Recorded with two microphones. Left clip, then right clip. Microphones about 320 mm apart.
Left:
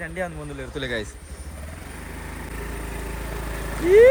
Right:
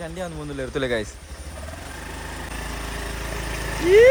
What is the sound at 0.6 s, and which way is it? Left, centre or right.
Speech, centre.